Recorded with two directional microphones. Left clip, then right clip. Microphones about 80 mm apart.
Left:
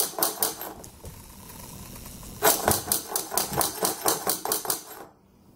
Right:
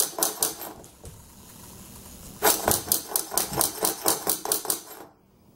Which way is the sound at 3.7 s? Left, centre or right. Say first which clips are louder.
Even; centre.